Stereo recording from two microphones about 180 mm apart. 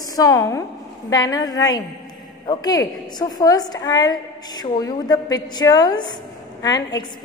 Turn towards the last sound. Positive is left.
turn(degrees=20)  # may be behind; listen again after turning